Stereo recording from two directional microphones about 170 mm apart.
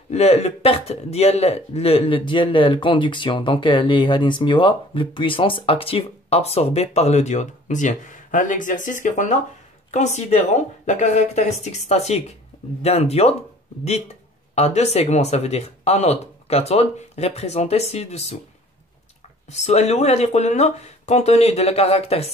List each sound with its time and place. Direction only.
0.1 s speech: 40° left (ahead or behind)
14.5 s speech: 40° left (ahead or behind)
19.5 s speech: 40° left (ahead or behind)